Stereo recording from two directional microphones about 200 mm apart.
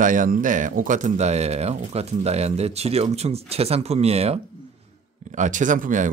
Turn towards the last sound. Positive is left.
turn(degrees=-40)  # may be behind; listen again after turning